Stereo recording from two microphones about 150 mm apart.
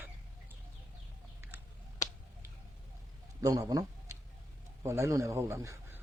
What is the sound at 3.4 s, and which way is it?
A man's voice, 25° right (ahead or behind).